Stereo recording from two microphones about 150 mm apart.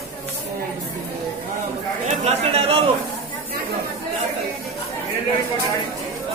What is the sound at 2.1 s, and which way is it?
Speech, 40° right (ahead or behind).